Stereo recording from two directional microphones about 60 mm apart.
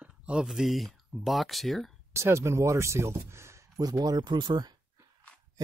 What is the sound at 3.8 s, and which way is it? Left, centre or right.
Speech, right.